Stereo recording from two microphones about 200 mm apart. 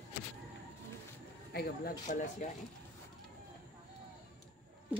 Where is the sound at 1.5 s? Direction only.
50° left (ahead or behind).